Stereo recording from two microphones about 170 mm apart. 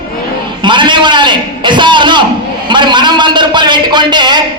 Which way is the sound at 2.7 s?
25° right (ahead or behind).